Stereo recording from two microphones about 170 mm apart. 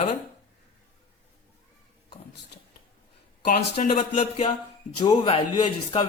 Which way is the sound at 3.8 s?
45° left (ahead or behind).